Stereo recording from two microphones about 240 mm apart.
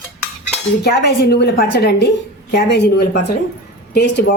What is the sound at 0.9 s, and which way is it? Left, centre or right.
A woman's voice, left.